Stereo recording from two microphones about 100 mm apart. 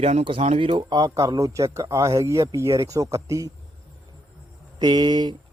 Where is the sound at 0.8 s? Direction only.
40° right (ahead or behind).